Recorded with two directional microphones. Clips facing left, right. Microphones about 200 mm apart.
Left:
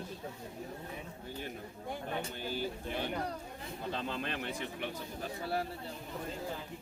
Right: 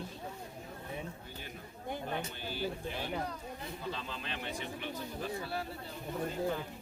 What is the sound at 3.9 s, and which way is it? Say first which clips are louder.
Speech: left 5 dB; 50° left (ahead or behind).